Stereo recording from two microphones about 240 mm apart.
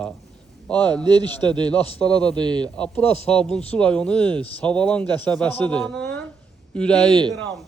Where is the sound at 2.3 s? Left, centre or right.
Centre.